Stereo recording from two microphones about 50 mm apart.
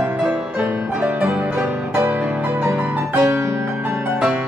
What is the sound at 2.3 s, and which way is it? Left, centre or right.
Music, right.